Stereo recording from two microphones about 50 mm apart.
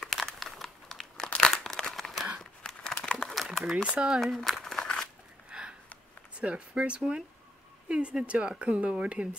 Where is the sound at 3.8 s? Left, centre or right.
Centre.